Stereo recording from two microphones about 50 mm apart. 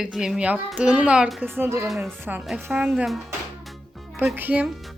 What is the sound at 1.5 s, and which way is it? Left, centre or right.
Music, right.